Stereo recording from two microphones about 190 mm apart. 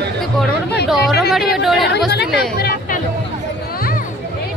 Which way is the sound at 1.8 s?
60° left (ahead or behind).